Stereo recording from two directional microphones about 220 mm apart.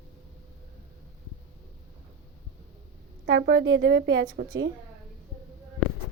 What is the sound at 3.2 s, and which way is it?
A woman's voice, 50° right (ahead or behind).